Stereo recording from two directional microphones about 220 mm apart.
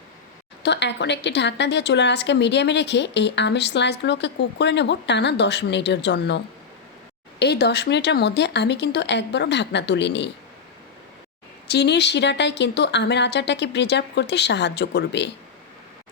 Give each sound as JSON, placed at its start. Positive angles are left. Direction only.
{"t": 0.6, "sound": "a woman's voice", "side_deg": 50}
{"t": 11.7, "sound": "a woman's voice", "side_deg": 50}